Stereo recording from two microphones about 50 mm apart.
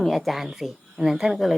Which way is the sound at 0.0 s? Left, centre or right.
Centre.